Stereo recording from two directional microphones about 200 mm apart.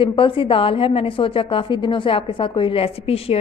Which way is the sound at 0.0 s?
25° left (ahead or behind).